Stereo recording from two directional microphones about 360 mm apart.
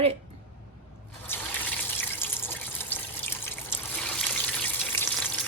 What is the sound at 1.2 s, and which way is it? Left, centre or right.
Water, centre.